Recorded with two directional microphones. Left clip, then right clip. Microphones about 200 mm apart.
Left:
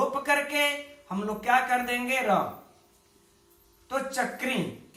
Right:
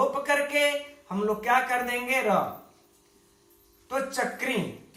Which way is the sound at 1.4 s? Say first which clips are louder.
Left 2 dB; 15° left (ahead or behind).